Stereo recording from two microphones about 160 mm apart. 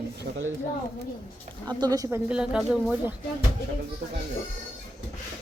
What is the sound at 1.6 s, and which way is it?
Speech, 25° right (ahead or behind).